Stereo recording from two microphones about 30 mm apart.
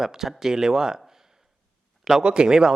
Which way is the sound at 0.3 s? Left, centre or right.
Centre.